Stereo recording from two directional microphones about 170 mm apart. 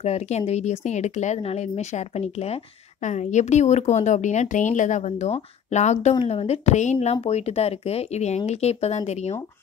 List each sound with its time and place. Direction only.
0.0 s speech: 40° left (ahead or behind)